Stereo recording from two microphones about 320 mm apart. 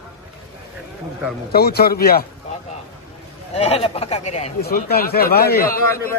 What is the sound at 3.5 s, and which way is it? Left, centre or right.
A man's voice, centre.